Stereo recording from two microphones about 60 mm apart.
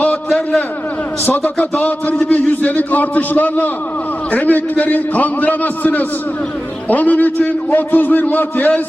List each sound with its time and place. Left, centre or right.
1.2 s a man's voice: left